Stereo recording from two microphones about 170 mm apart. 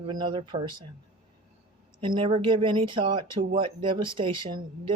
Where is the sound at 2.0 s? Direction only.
30° right (ahead or behind).